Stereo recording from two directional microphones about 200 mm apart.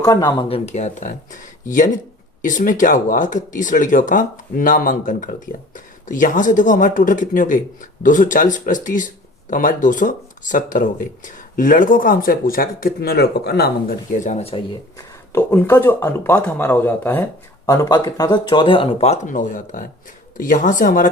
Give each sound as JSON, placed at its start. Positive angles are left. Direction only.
{"t": 0.0, "sound": "speech", "side_deg": 20}
{"t": 15.3, "sound": "speech", "side_deg": 10}